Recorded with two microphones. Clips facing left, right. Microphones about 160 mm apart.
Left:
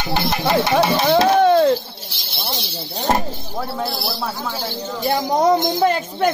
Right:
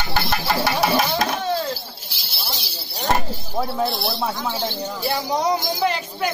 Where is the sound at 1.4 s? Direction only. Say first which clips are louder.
Left 11 dB; 60° left (ahead or behind).